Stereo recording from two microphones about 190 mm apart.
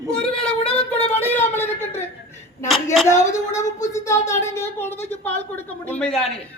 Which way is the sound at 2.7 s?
Centre (ahead or behind).